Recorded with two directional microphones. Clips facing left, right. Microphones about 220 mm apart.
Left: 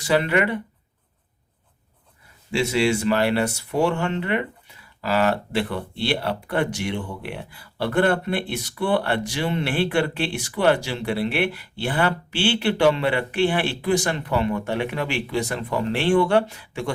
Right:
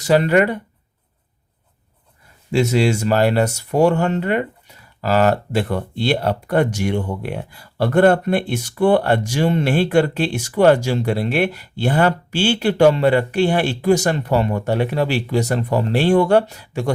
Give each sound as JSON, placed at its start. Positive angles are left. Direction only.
{"t": 0.0, "sound": "speech", "side_deg": -40}
{"t": 2.5, "sound": "speech", "side_deg": -45}